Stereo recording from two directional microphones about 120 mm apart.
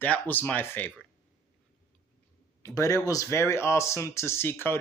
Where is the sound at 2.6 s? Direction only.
30° left (ahead or behind).